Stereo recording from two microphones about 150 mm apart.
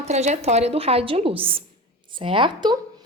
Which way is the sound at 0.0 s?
45° right (ahead or behind).